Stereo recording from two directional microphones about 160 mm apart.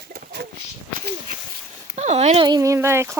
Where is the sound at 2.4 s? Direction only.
25° right (ahead or behind).